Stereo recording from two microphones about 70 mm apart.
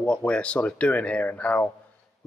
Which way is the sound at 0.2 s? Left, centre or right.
Centre.